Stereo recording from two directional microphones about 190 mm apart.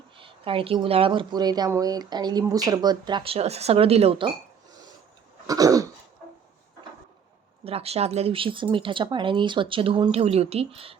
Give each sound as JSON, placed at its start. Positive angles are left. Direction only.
{"t": 0.2, "sound": "speech", "side_deg": -25}
{"t": 5.5, "sound": "throat clearing", "side_deg": -20}
{"t": 7.6, "sound": "speech", "side_deg": -30}